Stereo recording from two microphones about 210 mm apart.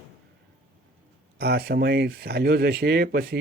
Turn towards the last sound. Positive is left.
turn(degrees=-50)  # may be behind; listen again after turning